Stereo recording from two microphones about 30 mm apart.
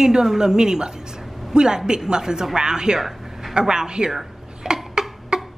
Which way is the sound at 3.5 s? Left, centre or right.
Right.